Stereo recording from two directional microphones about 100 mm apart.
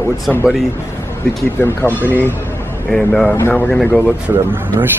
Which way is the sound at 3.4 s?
20° left (ahead or behind).